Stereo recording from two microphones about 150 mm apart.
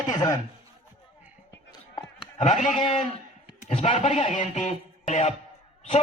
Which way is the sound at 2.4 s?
55° left (ahead or behind).